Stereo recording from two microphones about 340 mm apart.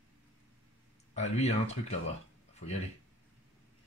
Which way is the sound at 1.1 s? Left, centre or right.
Centre.